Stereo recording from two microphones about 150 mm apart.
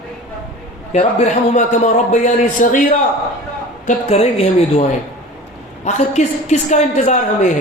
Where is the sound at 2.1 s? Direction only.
60° left (ahead or behind).